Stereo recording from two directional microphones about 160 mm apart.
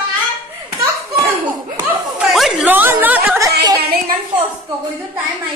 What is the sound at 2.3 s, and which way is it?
A woman's voice, centre (ahead or behind).